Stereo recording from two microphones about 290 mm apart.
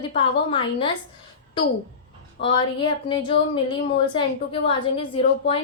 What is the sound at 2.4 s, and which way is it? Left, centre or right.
A woman's voice, centre.